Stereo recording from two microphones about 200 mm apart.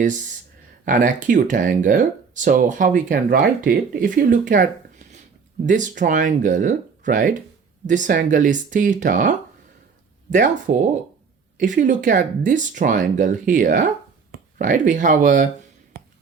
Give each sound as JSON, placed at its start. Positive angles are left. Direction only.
{"t": 0.9, "sound": "speech", "side_deg": -40}